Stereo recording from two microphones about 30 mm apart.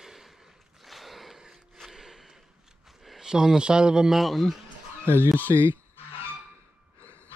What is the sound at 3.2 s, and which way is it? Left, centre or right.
Speech, centre.